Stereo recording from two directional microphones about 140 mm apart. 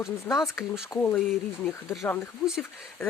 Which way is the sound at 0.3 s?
20° left (ahead or behind).